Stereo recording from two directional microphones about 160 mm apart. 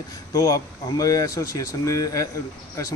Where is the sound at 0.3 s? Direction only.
20° left (ahead or behind).